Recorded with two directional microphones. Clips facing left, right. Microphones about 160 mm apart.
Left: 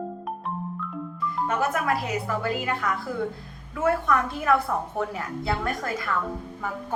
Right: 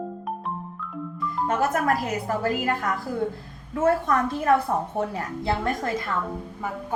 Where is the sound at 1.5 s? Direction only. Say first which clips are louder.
Right 3 dB; 45° right (ahead or behind).